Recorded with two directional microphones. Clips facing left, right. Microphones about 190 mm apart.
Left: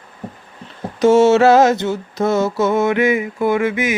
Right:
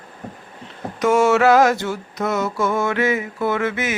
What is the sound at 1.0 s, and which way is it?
Mantra, 25° left (ahead or behind).